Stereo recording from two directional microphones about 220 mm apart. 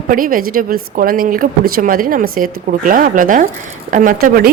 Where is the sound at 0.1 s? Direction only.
40° right (ahead or behind).